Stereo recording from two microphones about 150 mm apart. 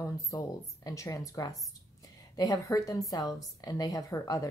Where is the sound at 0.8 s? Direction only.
20° left (ahead or behind).